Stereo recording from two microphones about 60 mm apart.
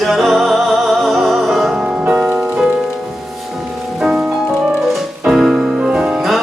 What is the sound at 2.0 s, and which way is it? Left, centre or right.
Music, right.